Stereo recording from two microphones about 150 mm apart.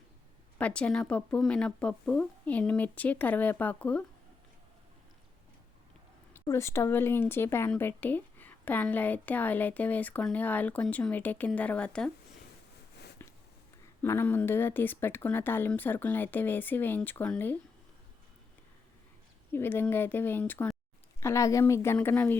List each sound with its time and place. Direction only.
0.6 s speech: 5° left (ahead or behind)
6.3 s speech: 20° left (ahead or behind)
13.2 s a sound: 15° left (ahead or behind)
14.0 s speech: 15° left (ahead or behind)
19.5 s a woman's voice: 15° left (ahead or behind)